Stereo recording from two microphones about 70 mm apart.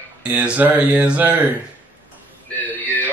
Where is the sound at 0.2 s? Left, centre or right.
Centre.